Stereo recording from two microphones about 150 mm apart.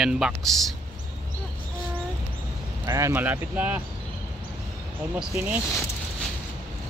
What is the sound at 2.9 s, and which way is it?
Speech, 20° right (ahead or behind).